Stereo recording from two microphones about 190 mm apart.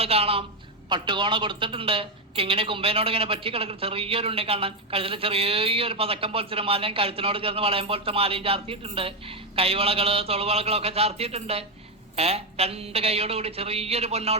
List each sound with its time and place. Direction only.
0.0 s a woman's voice: 30° right (ahead or behind)